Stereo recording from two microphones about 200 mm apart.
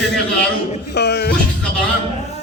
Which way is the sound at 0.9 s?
55° left (ahead or behind).